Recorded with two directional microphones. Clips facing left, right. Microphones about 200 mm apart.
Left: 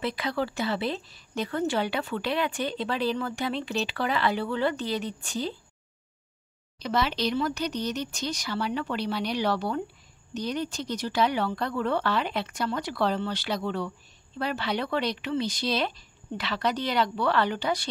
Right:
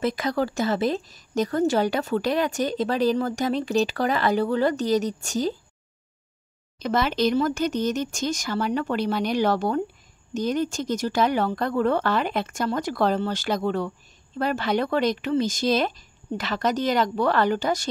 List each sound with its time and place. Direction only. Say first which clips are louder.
0.0 s speech: right 5 dB; 45° right (ahead or behind)
6.8 s speech: right 5 dB; 50° right (ahead or behind)